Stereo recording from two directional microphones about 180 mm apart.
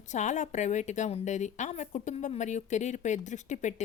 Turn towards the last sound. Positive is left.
turn(degrees=40)  # may be behind; listen again after turning